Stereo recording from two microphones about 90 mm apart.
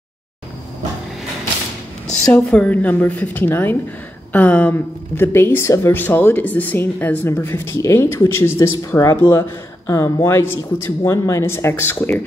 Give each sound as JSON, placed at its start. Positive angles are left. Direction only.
{"t": 2.3, "sound": "speech", "side_deg": 15}